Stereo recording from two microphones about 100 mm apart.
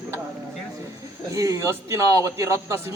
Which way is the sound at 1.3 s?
35° right (ahead or behind).